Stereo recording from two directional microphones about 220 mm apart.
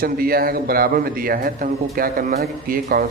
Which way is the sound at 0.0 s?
40° right (ahead or behind).